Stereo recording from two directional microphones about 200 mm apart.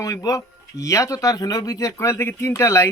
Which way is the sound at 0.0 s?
15° left (ahead or behind).